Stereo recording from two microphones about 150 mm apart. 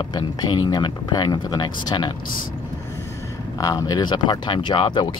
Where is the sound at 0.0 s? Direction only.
30° left (ahead or behind).